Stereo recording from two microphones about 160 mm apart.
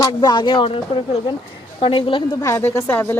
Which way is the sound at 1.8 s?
30° left (ahead or behind).